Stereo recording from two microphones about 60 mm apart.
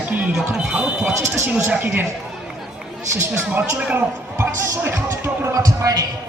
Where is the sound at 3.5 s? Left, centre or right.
Right.